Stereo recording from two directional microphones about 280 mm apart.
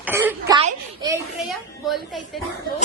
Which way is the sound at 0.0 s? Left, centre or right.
Centre.